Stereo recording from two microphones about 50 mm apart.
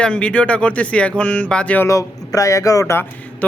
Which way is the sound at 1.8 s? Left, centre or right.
Left.